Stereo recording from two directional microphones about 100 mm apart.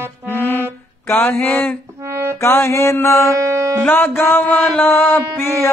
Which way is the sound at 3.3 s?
30° right (ahead or behind).